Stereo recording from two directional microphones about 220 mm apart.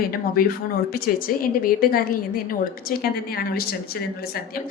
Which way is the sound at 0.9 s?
40° left (ahead or behind).